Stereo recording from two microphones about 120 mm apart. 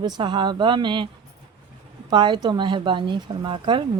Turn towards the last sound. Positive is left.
turn(degrees=-45)  # may be behind; listen again after turning